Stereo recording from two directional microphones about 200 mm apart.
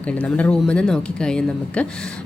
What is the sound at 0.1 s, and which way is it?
A woman's voice, 5° left (ahead or behind).